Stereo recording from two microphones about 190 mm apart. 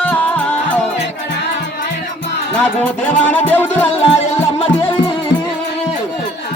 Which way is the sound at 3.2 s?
10° left (ahead or behind).